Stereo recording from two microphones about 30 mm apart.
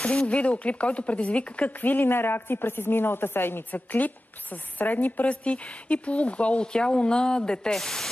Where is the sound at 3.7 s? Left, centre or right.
Left.